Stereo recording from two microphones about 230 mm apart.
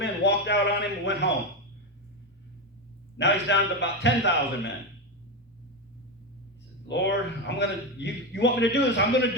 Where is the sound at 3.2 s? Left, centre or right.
Left.